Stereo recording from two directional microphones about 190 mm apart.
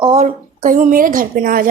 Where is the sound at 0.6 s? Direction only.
45° right (ahead or behind).